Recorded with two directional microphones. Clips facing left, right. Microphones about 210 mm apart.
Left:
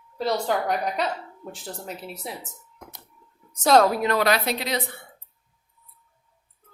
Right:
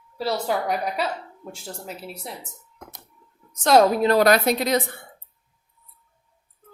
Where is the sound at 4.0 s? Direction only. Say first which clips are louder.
Right 5 dB; 35° right (ahead or behind).